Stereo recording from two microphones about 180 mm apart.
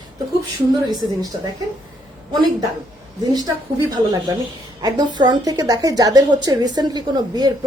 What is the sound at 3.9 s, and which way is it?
A woman's voice, 20° right (ahead or behind).